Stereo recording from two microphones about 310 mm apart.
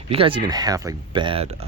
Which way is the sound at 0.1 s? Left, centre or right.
Centre.